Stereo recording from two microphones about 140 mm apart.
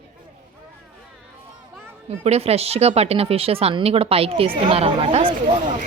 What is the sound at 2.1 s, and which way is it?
Speech, 45° right (ahead or behind).